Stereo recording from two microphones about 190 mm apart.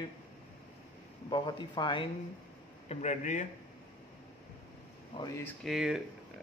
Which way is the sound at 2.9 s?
35° left (ahead or behind).